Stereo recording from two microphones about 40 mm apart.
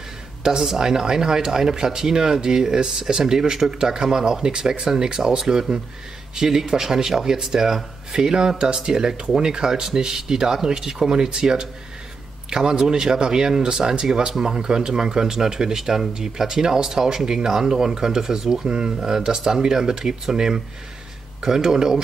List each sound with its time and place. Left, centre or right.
0.4 s speech: centre